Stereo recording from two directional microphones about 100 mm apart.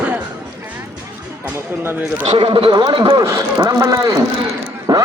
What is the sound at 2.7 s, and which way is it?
Speech, 45° right (ahead or behind).